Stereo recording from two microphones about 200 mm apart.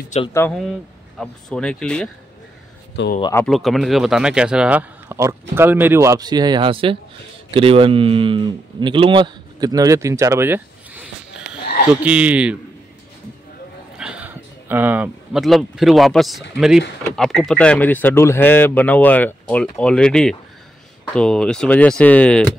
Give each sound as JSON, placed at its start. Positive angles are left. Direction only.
{"t": 0.3, "sound": "speech", "side_deg": 10}
{"t": 0.6, "sound": "speech", "side_deg": 0}
{"t": 3.2, "sound": "speech", "side_deg": 20}
{"t": 3.4, "sound": "speech", "side_deg": 0}
{"t": 13.9, "sound": "speech", "side_deg": -5}